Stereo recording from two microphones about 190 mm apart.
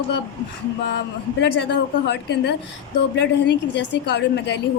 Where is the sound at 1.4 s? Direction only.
60° left (ahead or behind).